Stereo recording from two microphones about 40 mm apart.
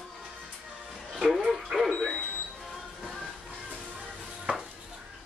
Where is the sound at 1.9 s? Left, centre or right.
Centre.